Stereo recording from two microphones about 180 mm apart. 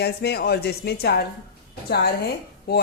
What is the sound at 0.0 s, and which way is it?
A woman's voice, 65° left (ahead or behind).